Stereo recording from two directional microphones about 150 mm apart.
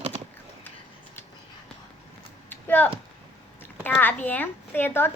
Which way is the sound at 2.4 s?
10° left (ahead or behind).